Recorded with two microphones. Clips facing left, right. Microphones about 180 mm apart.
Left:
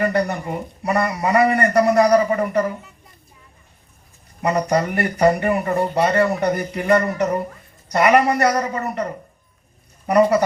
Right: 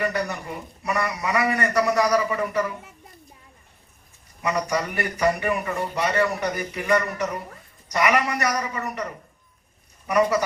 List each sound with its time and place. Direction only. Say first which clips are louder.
0.0 s a woman's voice: left 6 dB; 55° left (ahead or behind)
4.4 s a woman's voice: left 6 dB; 55° left (ahead or behind)